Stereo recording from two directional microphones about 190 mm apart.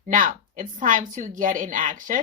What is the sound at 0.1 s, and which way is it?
Speech, 45° right (ahead or behind).